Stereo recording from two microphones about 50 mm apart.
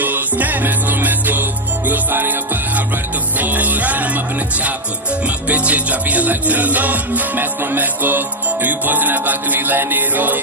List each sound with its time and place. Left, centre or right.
0.0 s music: right
5.5 s music: right